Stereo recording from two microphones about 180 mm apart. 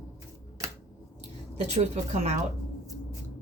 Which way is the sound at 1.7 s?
40° right (ahead or behind).